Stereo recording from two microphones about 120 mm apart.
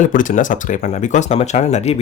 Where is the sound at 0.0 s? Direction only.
90° left.